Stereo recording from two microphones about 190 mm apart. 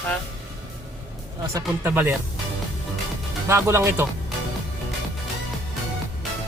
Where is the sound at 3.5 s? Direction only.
15° right (ahead or behind).